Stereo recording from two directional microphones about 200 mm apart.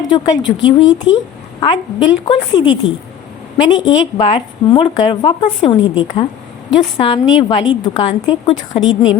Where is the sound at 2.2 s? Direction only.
20° left (ahead or behind).